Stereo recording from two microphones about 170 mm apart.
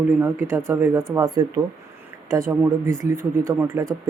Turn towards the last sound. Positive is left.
turn(degrees=-15)  # may be behind; listen again after turning